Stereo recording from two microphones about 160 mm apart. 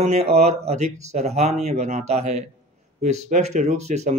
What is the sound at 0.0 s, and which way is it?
Speech, 45° right (ahead or behind).